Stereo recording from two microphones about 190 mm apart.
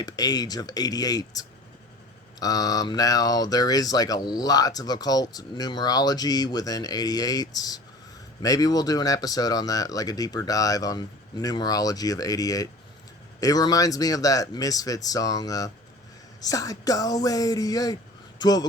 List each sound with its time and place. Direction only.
0.0 s speech: 20° left (ahead or behind)